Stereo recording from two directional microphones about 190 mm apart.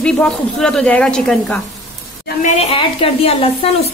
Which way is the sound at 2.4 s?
30° left (ahead or behind).